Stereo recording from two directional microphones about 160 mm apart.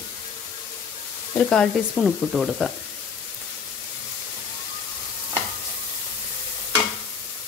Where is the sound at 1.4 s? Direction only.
5° left (ahead or behind).